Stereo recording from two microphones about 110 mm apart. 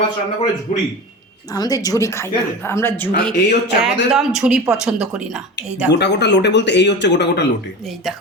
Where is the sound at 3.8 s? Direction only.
5° right (ahead or behind).